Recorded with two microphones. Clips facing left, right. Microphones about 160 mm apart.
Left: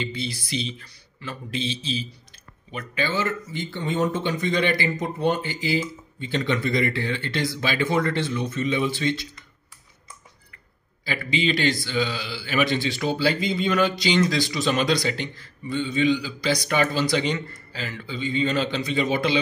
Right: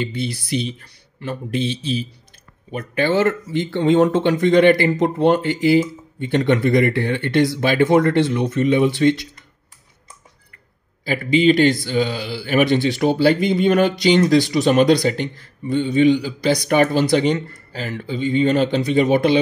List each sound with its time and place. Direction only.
0.0 s speech: 60° right (ahead or behind)
11.1 s speech: 50° right (ahead or behind)